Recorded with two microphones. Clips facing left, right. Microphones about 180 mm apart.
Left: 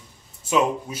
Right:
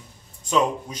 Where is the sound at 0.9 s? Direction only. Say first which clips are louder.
Left 3 dB; 5° left (ahead or behind).